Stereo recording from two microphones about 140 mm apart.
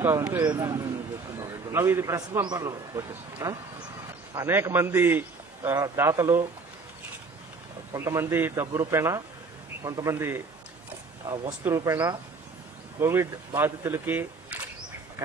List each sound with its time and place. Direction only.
0.4 s a man's voice: 25° right (ahead or behind)
7.9 s a man's voice: 20° right (ahead or behind)